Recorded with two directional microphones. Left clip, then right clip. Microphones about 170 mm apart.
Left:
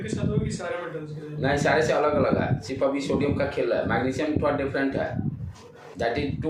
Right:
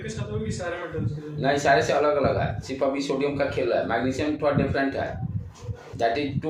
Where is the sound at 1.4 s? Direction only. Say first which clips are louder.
Right 2 dB; 20° right (ahead or behind).